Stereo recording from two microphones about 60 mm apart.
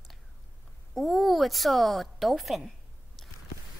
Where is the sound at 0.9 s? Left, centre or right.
Centre.